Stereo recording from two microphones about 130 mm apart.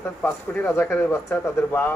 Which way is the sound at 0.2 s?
15° left (ahead or behind).